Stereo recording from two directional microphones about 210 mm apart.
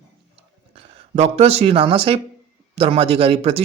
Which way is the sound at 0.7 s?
30° right (ahead or behind).